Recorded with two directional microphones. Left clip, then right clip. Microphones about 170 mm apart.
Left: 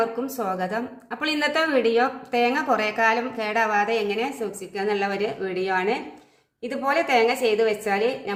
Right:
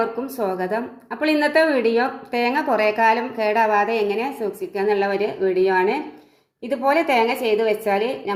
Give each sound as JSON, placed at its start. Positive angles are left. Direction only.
{"t": 0.0, "sound": "a woman's voice", "side_deg": -15}